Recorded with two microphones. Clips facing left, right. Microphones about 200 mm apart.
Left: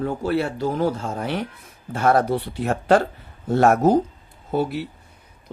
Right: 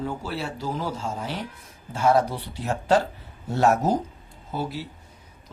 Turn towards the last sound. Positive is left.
turn(degrees=60)  # may be behind; listen again after turning